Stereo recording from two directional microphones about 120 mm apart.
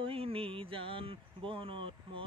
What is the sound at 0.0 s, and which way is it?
Speech, 50° right (ahead or behind).